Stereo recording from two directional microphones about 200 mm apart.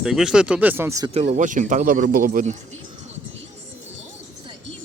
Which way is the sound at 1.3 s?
40° right (ahead or behind).